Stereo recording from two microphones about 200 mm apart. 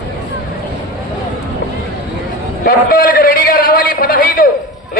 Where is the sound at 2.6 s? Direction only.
45° left (ahead or behind).